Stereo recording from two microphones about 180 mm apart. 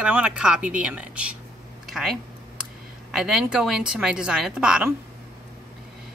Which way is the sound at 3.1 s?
5° right (ahead or behind).